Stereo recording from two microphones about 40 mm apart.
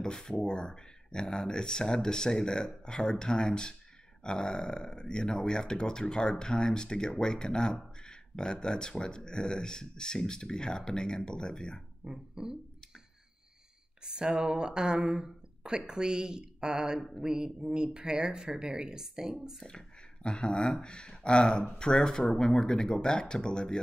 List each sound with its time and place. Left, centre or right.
0.0 s speech: centre
12.0 s a sound: centre
14.0 s speech: centre
20.2 s speech: left